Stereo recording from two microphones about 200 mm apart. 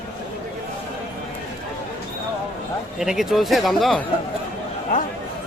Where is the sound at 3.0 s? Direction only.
Centre (ahead or behind).